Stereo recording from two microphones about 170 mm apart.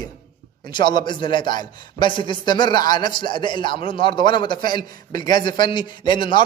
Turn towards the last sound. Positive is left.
turn(degrees=30)  # may be behind; listen again after turning